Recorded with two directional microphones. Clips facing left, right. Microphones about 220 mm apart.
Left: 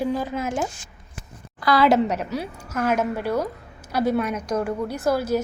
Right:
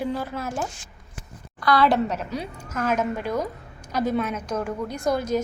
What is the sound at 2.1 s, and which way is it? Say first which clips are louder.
A woman's voice: left 2 dB; 5° left (ahead or behind).